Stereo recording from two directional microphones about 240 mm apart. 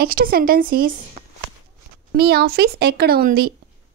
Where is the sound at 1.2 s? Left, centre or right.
Right.